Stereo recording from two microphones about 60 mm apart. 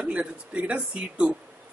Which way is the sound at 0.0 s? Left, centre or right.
Right.